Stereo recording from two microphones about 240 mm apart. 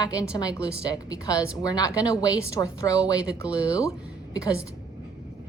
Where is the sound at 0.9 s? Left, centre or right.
Centre.